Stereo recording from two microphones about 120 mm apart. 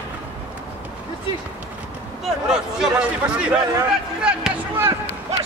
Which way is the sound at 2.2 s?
5° right (ahead or behind).